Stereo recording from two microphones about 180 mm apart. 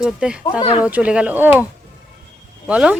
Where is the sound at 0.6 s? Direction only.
25° left (ahead or behind).